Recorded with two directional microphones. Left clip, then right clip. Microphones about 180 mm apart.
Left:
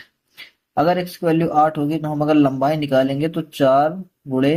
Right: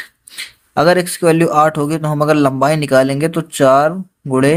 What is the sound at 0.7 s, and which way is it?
A man's voice, 35° right (ahead or behind).